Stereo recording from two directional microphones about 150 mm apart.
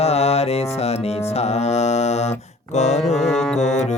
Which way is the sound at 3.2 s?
Centre (ahead or behind).